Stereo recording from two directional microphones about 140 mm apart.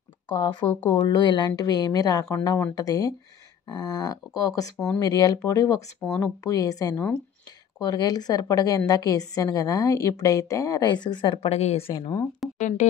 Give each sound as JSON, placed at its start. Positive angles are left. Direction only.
{"t": 0.3, "sound": "a woman's voice", "side_deg": 30}
{"t": 11.9, "sound": "a woman's voice", "side_deg": 30}
{"t": 12.5, "sound": "speech", "side_deg": 60}